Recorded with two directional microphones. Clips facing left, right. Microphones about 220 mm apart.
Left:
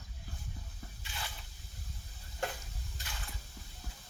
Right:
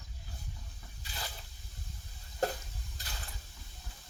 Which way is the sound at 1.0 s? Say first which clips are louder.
Right 2 dB; 35° right (ahead or behind).